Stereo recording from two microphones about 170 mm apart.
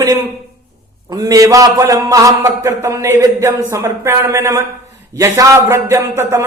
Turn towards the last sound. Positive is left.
turn(degrees=-15)  # may be behind; listen again after turning